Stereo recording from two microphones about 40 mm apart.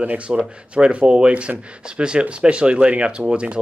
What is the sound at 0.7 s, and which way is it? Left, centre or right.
Speech, right.